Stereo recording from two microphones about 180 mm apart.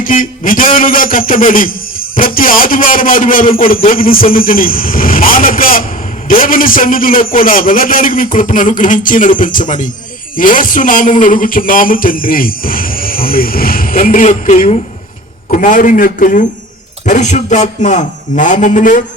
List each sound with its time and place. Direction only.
0.0 s speech: 50° left (ahead or behind)